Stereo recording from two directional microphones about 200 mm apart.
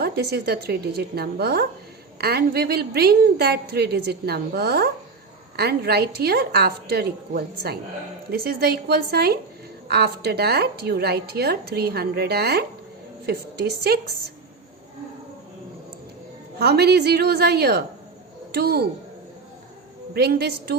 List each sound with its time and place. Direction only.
0.0 s a woman's voice: 55° right (ahead or behind)
16.6 s a woman's voice: 55° right (ahead or behind)
20.1 s a woman's voice: 55° right (ahead or behind)